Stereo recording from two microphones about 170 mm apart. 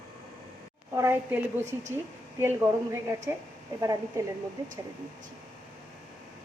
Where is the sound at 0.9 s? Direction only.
15° right (ahead or behind).